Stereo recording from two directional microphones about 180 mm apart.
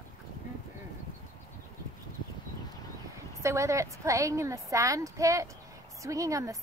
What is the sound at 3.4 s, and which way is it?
A woman's voice, 15° right (ahead or behind).